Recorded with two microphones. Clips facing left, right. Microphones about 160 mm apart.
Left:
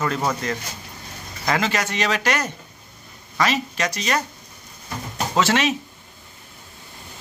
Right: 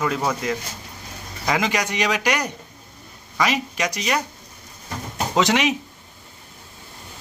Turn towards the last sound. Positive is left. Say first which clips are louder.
# right 1 dB
turn(degrees=-15)  # may be behind; listen again after turning